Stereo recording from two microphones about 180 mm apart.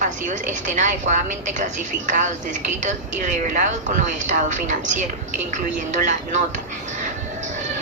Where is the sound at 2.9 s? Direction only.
45° right (ahead or behind).